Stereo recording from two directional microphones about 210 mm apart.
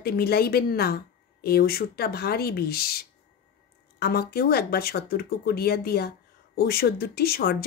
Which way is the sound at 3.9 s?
45° left (ahead or behind).